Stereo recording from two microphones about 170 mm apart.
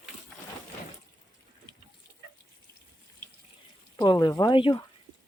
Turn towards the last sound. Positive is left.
turn(degrees=25)  # may be behind; listen again after turning